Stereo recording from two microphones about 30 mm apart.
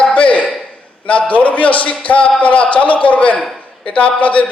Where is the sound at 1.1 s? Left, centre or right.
Left.